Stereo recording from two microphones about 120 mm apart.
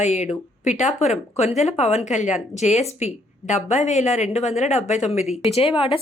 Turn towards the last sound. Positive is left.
turn(degrees=45)  # may be behind; listen again after turning